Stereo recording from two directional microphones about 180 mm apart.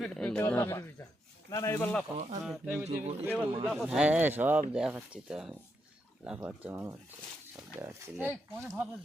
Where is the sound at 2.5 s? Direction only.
5° right (ahead or behind).